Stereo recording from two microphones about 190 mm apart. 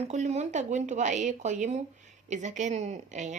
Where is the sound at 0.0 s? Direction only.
35° right (ahead or behind).